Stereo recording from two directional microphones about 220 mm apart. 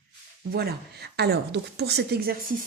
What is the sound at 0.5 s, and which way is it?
Speech, 45° right (ahead or behind).